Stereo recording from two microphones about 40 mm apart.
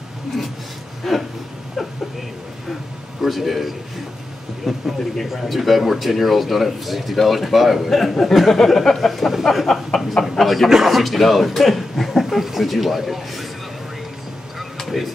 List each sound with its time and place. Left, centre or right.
1.0 s speech: centre
1.8 s a sound: centre
3.2 s a man's voice: centre